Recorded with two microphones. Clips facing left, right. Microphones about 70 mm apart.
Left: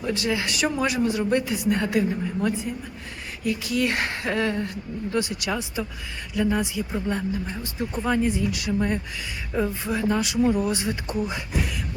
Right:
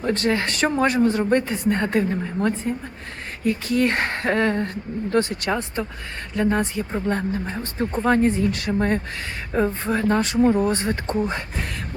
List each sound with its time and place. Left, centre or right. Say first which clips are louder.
0.0 s speech: right 4 dB; right